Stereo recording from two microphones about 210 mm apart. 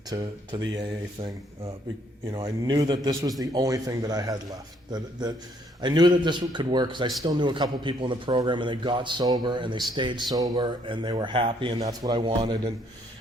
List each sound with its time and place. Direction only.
0.1 s speech: 20° right (ahead or behind)